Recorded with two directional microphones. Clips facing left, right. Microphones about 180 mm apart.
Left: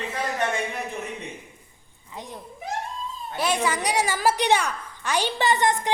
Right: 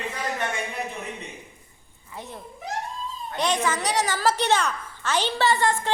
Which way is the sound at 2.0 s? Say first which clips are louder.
Even; 15° left (ahead or behind).